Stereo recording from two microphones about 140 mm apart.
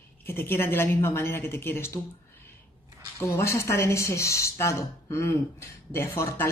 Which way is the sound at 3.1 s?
20° left (ahead or behind).